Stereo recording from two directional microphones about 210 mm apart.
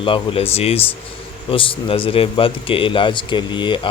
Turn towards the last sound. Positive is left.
turn(degrees=20)  # may be behind; listen again after turning